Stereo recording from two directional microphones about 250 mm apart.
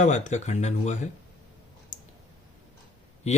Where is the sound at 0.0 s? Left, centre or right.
Left.